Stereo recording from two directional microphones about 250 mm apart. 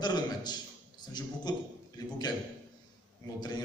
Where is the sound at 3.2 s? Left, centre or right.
Centre.